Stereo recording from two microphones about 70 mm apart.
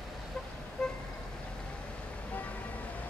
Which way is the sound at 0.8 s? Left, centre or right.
Centre.